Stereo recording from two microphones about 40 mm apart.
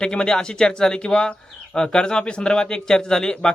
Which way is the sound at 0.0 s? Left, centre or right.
Left.